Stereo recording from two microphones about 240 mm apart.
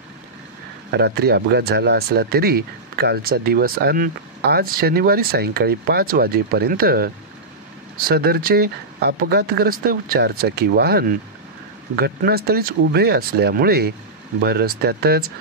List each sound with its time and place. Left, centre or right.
0.9 s speech: right